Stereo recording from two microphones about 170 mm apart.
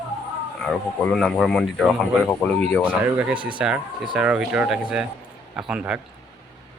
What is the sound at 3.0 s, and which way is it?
Speech, 10° right (ahead or behind).